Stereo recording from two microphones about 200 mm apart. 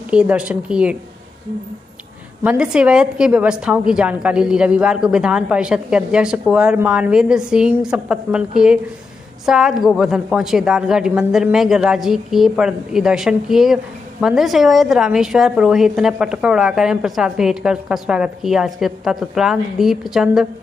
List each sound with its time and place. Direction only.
0.1 s a woman's voice: 5° right (ahead or behind)
2.4 s a woman's voice: 5° right (ahead or behind)